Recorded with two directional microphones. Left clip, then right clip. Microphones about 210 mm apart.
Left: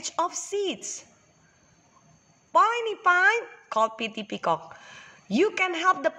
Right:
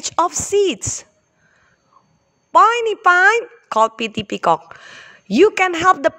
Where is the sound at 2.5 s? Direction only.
45° right (ahead or behind).